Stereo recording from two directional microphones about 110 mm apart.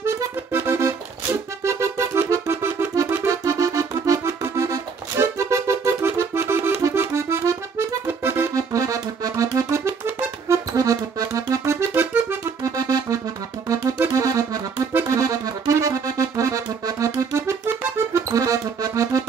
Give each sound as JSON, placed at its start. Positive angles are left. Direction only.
{"t": 0.0, "sound": "accordion", "side_deg": -20}
{"t": 1.6, "sound": "music", "side_deg": -25}
{"t": 5.1, "sound": "accordion", "side_deg": -25}
{"t": 10.8, "sound": "accordion", "side_deg": -30}
{"t": 12.7, "sound": "music", "side_deg": -35}
{"t": 14.1, "sound": "accordion", "side_deg": -30}